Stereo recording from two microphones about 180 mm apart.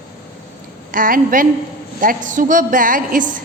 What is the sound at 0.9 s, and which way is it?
A woman's voice, 50° right (ahead or behind).